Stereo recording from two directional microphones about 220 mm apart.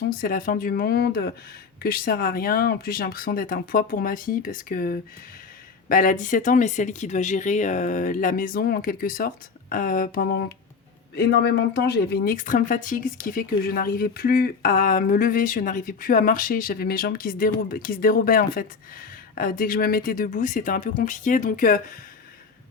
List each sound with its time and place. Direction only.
0.1 s speech: 40° left (ahead or behind)